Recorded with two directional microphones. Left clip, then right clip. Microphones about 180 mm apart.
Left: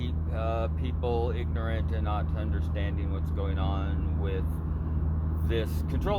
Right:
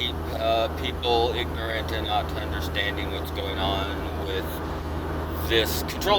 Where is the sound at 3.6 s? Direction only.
45° left (ahead or behind).